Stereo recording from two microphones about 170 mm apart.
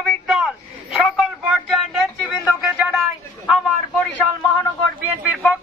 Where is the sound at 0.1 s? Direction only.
Centre (ahead or behind).